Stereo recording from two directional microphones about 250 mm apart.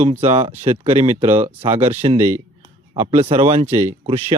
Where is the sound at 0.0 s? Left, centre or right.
Right.